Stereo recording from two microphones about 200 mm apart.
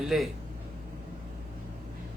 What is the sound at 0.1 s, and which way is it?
Speech, centre (ahead or behind).